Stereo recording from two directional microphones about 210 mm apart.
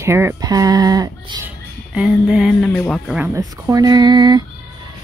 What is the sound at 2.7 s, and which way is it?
Speech, 5° left (ahead or behind).